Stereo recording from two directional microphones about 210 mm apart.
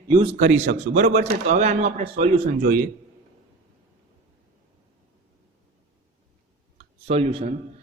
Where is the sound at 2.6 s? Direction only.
40° right (ahead or behind).